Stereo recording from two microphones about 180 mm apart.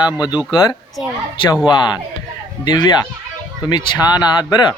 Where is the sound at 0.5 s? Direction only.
20° left (ahead or behind).